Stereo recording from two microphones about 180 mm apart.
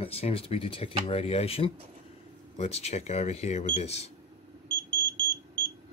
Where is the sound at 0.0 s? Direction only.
30° left (ahead or behind).